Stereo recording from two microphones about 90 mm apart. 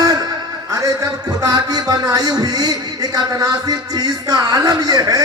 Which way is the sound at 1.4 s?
50° right (ahead or behind).